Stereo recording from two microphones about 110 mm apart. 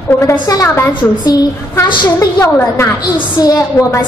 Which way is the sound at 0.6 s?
30° left (ahead or behind).